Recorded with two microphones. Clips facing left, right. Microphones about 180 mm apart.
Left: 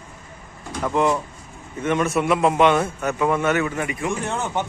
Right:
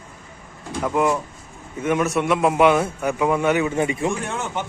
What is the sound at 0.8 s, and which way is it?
Speech, 5° right (ahead or behind).